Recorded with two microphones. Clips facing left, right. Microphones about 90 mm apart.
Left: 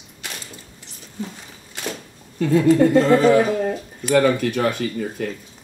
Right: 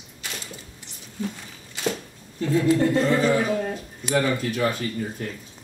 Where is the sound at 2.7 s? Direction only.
55° left (ahead or behind).